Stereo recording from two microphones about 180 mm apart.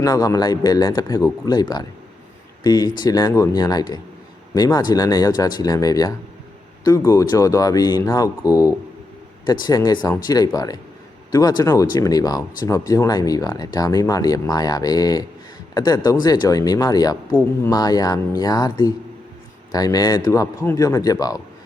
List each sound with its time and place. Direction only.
0.0 s speech: 20° left (ahead or behind)
2.6 s speech: 20° left (ahead or behind)